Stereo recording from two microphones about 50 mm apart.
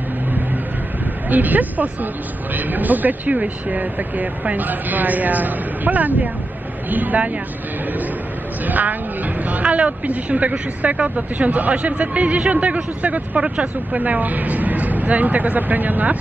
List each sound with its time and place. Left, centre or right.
1.3 s speech: right
8.6 s speech: right